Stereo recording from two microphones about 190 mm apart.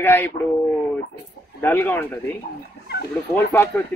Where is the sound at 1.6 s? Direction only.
10° left (ahead or behind).